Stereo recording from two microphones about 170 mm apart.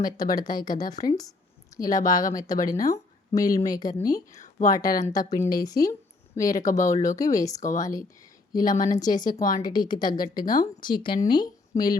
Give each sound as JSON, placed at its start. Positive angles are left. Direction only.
{"t": 0.0, "sound": "a woman's voice", "side_deg": 20}